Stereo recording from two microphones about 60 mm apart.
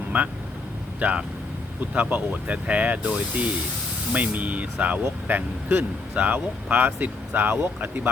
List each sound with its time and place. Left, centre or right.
0.1 s speech: right